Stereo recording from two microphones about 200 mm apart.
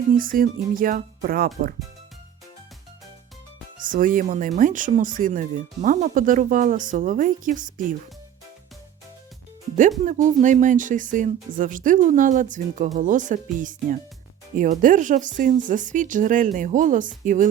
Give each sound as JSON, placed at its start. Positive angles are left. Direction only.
{"t": 0.2, "sound": "speech", "side_deg": -45}
{"t": 3.8, "sound": "speech", "side_deg": -45}
{"t": 10.0, "sound": "speech", "side_deg": -40}